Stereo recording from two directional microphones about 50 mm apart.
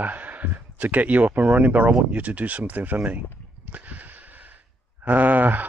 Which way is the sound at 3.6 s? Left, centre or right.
Right.